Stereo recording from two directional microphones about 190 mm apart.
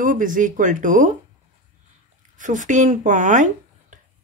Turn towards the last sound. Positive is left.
turn(degrees=-40)  # may be behind; listen again after turning